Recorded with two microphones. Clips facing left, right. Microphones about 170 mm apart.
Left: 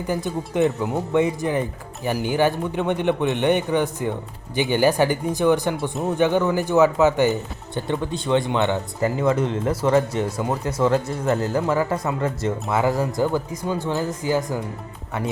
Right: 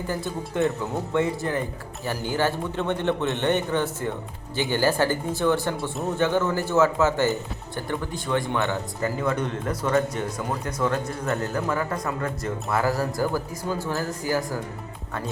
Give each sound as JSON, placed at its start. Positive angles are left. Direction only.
{"t": 0.1, "sound": "a man's voice", "side_deg": 15}